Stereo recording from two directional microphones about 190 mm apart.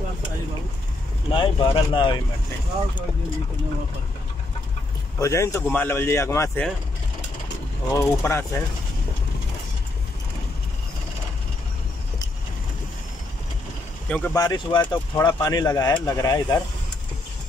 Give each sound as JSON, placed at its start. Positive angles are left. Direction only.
{"t": 1.3, "sound": "speech", "side_deg": 25}
{"t": 5.2, "sound": "speech", "side_deg": 15}
{"t": 7.9, "sound": "speech", "side_deg": 15}
{"t": 14.0, "sound": "speech", "side_deg": 5}
{"t": 14.3, "sound": "speech", "side_deg": 20}